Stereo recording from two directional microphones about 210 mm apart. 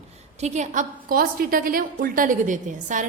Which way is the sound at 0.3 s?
35° right (ahead or behind).